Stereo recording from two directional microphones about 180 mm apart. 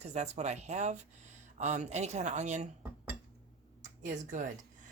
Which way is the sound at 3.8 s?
45° right (ahead or behind).